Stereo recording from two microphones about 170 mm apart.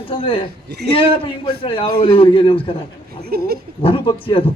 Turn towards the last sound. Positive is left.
turn(degrees=30)  # may be behind; listen again after turning